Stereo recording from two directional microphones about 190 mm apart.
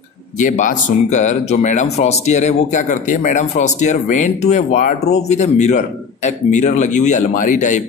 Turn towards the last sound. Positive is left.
turn(degrees=40)  # may be behind; listen again after turning